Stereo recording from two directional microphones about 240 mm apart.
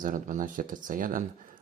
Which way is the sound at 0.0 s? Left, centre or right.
Right.